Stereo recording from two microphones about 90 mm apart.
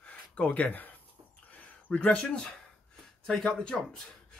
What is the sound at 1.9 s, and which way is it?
Speech, 15° left (ahead or behind).